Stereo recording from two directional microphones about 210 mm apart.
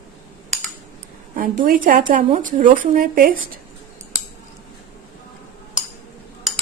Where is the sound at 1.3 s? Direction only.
40° right (ahead or behind).